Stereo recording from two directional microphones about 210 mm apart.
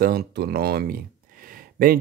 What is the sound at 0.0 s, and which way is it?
Speech, 45° right (ahead or behind).